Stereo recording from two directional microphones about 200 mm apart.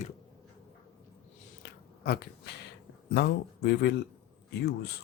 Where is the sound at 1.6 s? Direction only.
50° left (ahead or behind).